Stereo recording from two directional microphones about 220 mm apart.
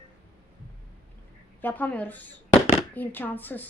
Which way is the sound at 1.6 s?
10° left (ahead or behind).